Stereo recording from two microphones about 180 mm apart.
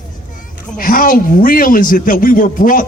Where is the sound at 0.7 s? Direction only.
50° left (ahead or behind).